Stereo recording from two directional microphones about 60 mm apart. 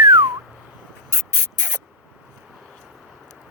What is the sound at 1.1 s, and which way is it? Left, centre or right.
Spray, right.